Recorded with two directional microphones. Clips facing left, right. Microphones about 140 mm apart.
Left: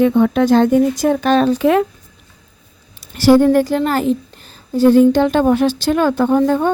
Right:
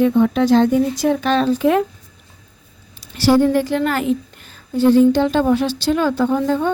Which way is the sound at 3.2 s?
50° left (ahead or behind).